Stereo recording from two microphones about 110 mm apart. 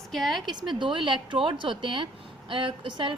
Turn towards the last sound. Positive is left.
turn(degrees=-50)  # may be behind; listen again after turning